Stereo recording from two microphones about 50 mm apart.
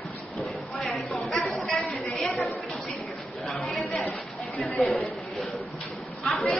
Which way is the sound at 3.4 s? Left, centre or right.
Centre.